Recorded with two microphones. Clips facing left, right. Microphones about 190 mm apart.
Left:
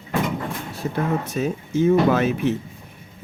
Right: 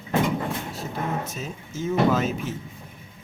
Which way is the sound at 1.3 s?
65° left (ahead or behind).